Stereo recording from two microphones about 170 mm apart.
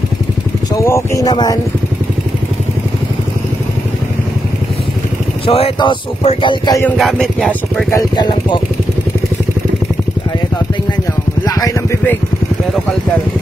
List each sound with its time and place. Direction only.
0.8 s speech: 15° left (ahead or behind)
5.5 s speech: 30° left (ahead or behind)
7.0 s speech: centre (ahead or behind)
7.9 s speech: 25° left (ahead or behind)
11.4 s a sound: 20° left (ahead or behind)